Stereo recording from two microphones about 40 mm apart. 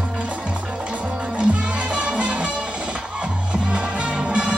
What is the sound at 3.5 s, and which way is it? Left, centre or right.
Music, right.